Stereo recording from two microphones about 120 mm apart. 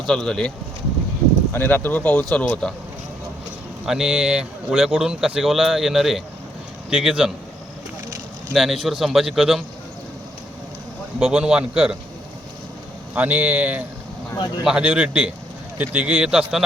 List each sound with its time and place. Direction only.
0.1 s speech: 5° left (ahead or behind)
1.5 s speech: 15° left (ahead or behind)
3.8 s speech: 5° right (ahead or behind)
8.5 s speech: centre (ahead or behind)
11.2 s a man's voice: 5° right (ahead or behind)
13.1 s a man's voice: 10° right (ahead or behind)
14.3 s speech: 35° left (ahead or behind)
14.6 s a man's voice: 10° right (ahead or behind)